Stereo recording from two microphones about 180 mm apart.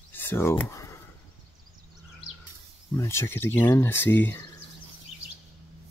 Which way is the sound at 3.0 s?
15° left (ahead or behind).